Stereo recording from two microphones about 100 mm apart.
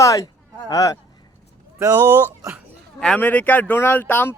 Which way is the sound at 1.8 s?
25° right (ahead or behind).